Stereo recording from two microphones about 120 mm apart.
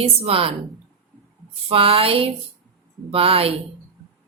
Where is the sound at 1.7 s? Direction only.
50° right (ahead or behind).